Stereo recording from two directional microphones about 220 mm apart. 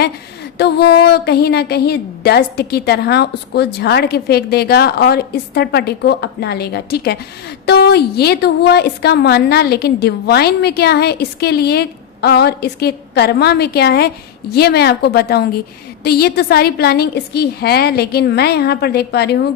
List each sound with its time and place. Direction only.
0.6 s a woman's voice: 50° left (ahead or behind)